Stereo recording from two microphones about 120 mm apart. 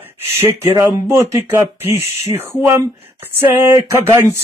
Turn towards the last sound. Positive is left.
turn(degrees=-20)  # may be behind; listen again after turning